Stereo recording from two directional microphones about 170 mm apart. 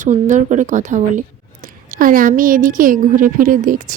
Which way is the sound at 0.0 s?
45° right (ahead or behind).